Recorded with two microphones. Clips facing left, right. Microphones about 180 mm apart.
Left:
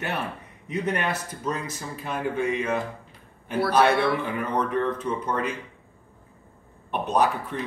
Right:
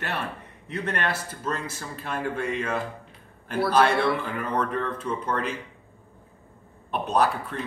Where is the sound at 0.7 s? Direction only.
10° left (ahead or behind).